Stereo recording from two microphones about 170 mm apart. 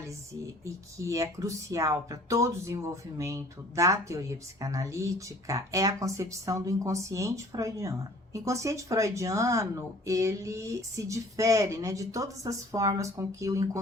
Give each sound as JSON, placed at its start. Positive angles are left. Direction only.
{"t": 0.6, "sound": "speech", "side_deg": -20}